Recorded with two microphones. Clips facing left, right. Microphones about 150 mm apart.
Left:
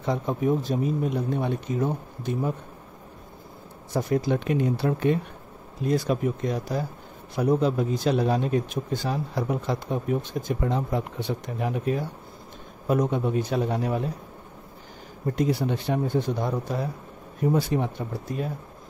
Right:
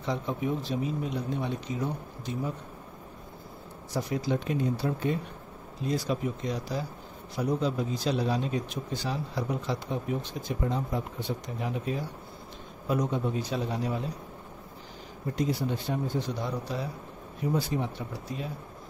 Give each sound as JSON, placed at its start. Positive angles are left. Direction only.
{"t": 0.0, "sound": "speech", "side_deg": 50}
{"t": 3.9, "sound": "speech", "side_deg": 55}
{"t": 5.8, "sound": "speech", "side_deg": 55}
{"t": 15.3, "sound": "speech", "side_deg": 65}
{"t": 17.4, "sound": "speech", "side_deg": 60}